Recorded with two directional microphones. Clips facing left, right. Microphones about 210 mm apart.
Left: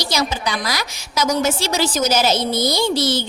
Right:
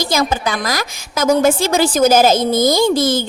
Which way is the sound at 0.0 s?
50° right (ahead or behind).